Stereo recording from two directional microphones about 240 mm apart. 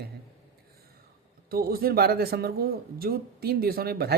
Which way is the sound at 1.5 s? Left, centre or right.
Right.